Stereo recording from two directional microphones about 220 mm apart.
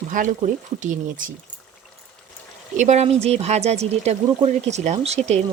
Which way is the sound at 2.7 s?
30° right (ahead or behind).